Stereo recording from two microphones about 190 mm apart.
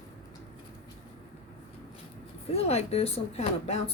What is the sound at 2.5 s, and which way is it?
A woman's voice, 35° left (ahead or behind).